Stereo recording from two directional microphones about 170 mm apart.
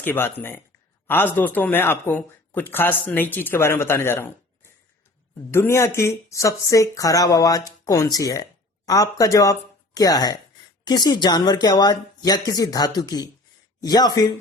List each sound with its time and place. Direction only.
0.0 s speech: 10° left (ahead or behind)